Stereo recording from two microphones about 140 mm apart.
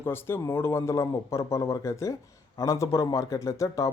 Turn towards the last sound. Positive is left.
turn(degrees=25)  # may be behind; listen again after turning